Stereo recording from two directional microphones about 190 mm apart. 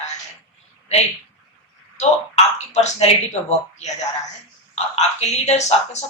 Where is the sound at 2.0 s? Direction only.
35° left (ahead or behind).